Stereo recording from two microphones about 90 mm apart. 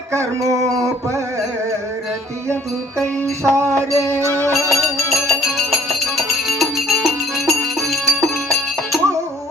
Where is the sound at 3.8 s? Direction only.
30° right (ahead or behind).